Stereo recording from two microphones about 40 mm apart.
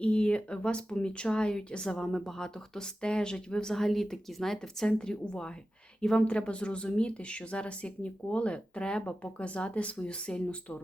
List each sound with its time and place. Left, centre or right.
0.0 s a woman's voice: left
2.0 s speech: centre
3.8 s a woman's voice: centre; by 10.4 s left